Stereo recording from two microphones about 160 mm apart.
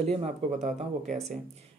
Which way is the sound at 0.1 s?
40° right (ahead or behind).